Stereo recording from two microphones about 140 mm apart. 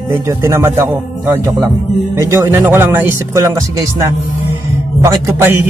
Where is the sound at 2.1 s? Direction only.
20° right (ahead or behind).